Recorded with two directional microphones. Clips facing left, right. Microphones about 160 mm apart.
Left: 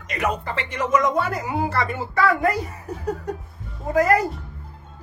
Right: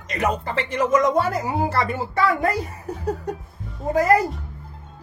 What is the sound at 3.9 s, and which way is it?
Speech, 30° right (ahead or behind).